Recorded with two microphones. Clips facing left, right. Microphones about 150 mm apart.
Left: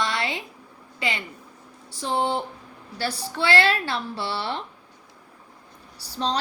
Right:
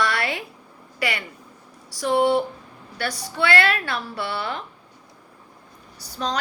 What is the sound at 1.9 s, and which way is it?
A woman's voice, 25° left (ahead or behind).